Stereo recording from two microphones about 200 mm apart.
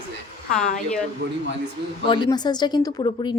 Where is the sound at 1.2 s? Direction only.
75° right (ahead or behind).